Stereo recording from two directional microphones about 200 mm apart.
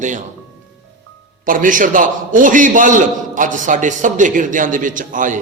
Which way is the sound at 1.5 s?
40° right (ahead or behind).